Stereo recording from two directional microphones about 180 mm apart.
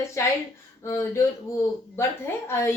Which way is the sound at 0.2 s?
15° left (ahead or behind).